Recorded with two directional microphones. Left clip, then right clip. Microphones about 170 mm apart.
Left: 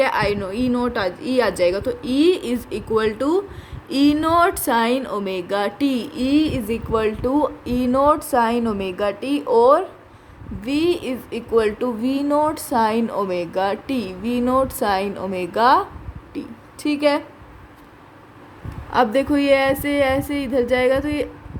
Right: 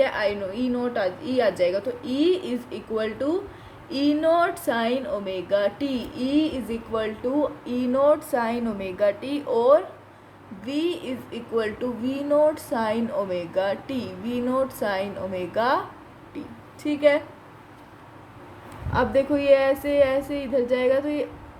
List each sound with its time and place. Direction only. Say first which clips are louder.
0.0 s speech: left 4 dB; 70° left (ahead or behind)
16.8 s speech: left 1 dB; 70° left (ahead or behind)
18.9 s speech: left 4 dB; 55° left (ahead or behind)